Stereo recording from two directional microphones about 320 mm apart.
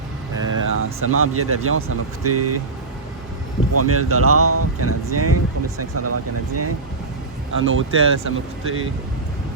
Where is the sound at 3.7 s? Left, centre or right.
Right.